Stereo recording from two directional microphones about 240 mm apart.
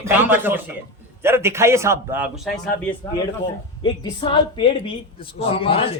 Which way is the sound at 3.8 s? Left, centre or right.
Left.